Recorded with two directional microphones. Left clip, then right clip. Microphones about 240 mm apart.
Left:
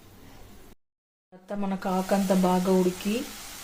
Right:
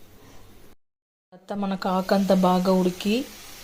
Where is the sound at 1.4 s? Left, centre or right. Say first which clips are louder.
Right 4 dB; right.